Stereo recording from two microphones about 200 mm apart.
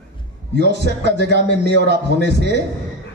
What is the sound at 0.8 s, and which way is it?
A man's voice, 55° right (ahead or behind).